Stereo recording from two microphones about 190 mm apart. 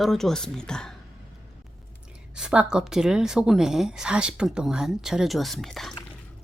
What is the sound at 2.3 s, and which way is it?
A woman's voice, 5° right (ahead or behind).